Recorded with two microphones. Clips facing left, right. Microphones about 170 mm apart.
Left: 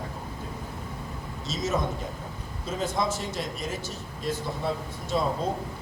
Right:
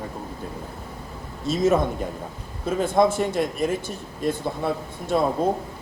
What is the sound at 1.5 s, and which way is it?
A man's voice, 55° right (ahead or behind).